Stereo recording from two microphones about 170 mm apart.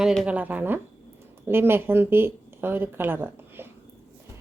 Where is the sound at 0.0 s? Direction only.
5° right (ahead or behind).